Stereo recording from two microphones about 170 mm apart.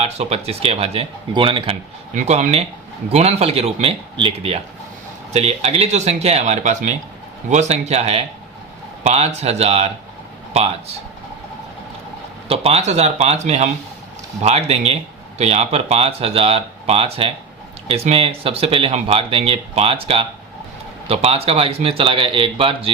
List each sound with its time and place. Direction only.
0.0 s speech: 35° right (ahead or behind)
2.1 s speech: 45° right (ahead or behind)
12.5 s speech: 35° right (ahead or behind)